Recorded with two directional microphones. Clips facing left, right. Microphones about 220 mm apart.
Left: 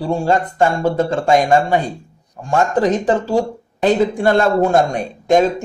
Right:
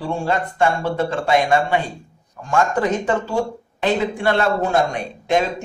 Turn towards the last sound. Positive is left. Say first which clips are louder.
# left 6 dB
turn(degrees=45)  # may be behind; listen again after turning